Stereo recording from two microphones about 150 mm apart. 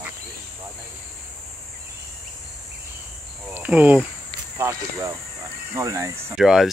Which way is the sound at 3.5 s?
15° right (ahead or behind).